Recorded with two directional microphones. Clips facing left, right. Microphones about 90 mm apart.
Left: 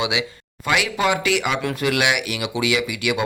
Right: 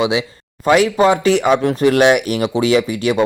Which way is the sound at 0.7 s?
35° right (ahead or behind).